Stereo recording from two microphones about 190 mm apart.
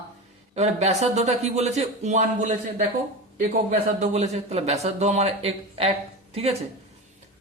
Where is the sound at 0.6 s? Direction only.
35° right (ahead or behind).